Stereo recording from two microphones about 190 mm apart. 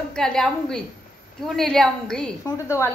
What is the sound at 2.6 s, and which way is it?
Speech, 15° left (ahead or behind).